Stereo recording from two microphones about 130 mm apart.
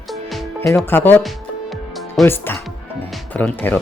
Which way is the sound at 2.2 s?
15° left (ahead or behind).